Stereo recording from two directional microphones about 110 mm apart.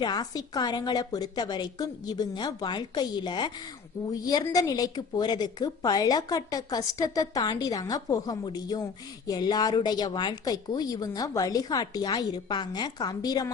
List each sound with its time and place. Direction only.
0.0 s a woman's voice: 40° left (ahead or behind)